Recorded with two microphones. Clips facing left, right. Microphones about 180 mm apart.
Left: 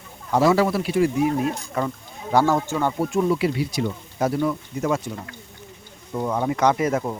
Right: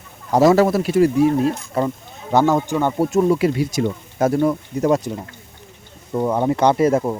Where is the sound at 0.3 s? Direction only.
40° right (ahead or behind).